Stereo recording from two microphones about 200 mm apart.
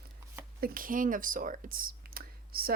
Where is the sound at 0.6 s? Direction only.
45° right (ahead or behind).